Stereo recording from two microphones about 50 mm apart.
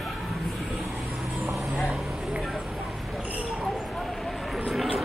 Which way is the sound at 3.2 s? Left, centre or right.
Right.